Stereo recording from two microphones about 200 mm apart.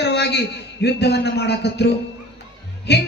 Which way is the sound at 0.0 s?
55° left (ahead or behind).